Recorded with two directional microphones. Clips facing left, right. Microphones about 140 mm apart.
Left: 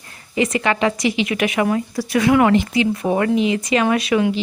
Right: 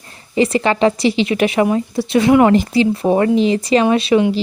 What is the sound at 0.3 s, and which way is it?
A woman's voice, 30° right (ahead or behind).